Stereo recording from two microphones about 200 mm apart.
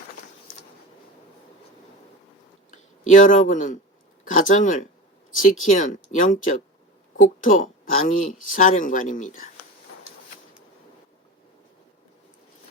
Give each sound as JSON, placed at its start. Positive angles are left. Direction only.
{"t": 2.6, "sound": "speech", "side_deg": 35}